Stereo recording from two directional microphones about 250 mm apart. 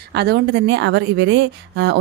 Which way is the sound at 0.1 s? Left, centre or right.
Right.